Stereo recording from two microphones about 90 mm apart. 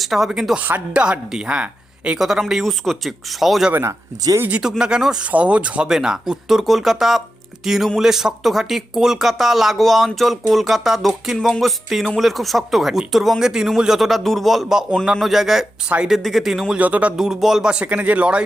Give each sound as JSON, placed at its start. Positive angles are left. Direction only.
{"t": 0.0, "sound": "speech", "side_deg": 0}
{"t": 0.6, "sound": "speech", "side_deg": -15}
{"t": 3.7, "sound": "speech", "side_deg": -25}
{"t": 16.1, "sound": "speech", "side_deg": 0}
{"t": 16.7, "sound": "speech", "side_deg": -15}